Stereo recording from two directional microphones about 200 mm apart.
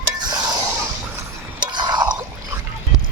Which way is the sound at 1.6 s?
20° right (ahead or behind).